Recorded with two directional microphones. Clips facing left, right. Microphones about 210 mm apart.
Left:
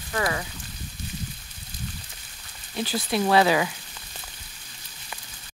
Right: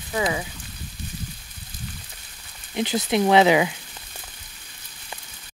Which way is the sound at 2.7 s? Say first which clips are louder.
Right 4 dB; 20° right (ahead or behind).